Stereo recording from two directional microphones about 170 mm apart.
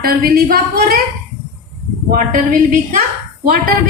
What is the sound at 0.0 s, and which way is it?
Speech, 65° right (ahead or behind).